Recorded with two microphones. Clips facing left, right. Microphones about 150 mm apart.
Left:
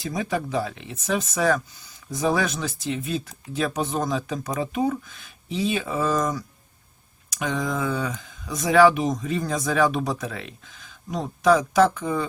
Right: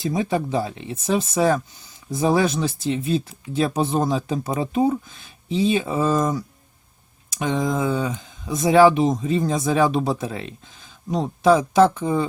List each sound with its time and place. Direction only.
0.0 s speech: 25° right (ahead or behind)